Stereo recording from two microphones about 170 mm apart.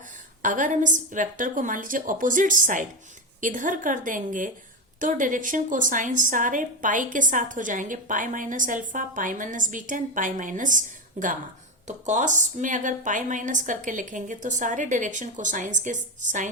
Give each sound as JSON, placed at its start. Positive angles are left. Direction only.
{"t": 0.4, "sound": "a woman's voice", "side_deg": -50}